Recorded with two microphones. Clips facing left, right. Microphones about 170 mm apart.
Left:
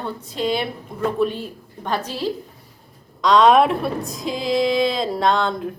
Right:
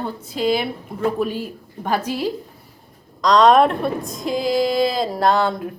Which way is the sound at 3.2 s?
Centre (ahead or behind).